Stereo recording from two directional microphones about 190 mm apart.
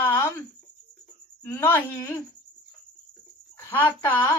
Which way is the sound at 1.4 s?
10° left (ahead or behind).